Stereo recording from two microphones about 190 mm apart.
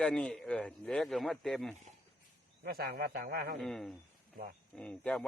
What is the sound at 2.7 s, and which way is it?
Speech, 55° right (ahead or behind).